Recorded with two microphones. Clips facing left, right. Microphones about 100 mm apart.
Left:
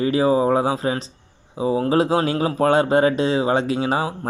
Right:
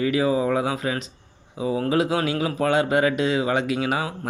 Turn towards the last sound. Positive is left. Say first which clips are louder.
# left 3 dB
turn(degrees=30)  # may be behind; listen again after turning